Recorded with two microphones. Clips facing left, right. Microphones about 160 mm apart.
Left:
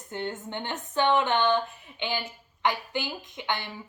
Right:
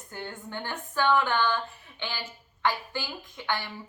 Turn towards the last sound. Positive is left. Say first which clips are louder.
# even
turn(degrees=20)  # may be behind; listen again after turning